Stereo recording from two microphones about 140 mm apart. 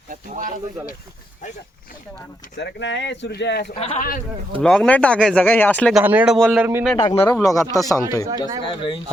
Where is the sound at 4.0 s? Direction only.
85° left.